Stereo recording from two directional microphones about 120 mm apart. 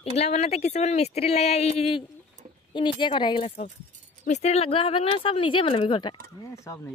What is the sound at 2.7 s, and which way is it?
Speech, 40° left (ahead or behind).